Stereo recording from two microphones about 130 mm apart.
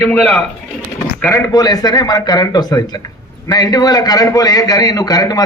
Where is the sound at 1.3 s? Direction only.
25° left (ahead or behind).